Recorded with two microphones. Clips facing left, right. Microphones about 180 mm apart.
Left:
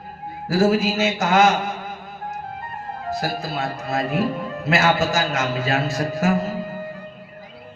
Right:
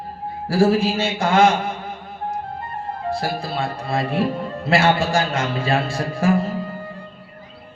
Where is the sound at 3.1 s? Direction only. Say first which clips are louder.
Even; 30° right (ahead or behind).